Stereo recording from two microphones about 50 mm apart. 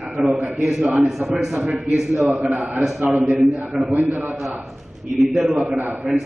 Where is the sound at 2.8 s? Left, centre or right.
Centre.